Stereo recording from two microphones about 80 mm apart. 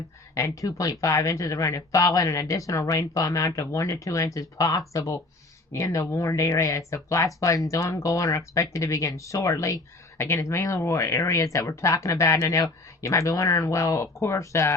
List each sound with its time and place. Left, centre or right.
0.3 s speech: left